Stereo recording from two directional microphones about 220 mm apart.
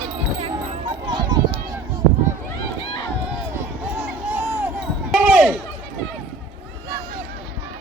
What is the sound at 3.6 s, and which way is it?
Basketball bounce, 10° right (ahead or behind).